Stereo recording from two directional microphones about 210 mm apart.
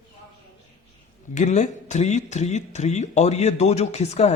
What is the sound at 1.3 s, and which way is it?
Speech, 35° left (ahead or behind).